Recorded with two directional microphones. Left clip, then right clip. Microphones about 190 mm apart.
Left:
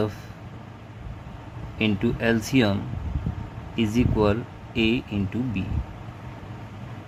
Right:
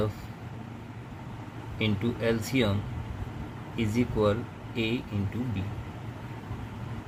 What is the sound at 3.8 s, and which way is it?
Speech, 50° left (ahead or behind).